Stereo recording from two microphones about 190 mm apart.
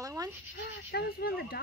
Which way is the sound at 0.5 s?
60° left (ahead or behind).